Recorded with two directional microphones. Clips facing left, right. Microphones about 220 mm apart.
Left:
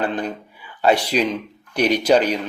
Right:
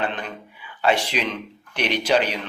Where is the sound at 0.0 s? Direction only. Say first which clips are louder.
Left 5 dB; 40° left (ahead or behind).